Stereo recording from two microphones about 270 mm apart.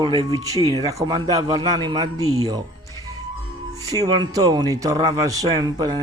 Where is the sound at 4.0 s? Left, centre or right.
Centre.